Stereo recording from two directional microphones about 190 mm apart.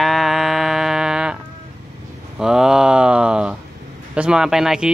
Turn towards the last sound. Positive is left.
turn(degrees=0)  # may be behind; listen again after turning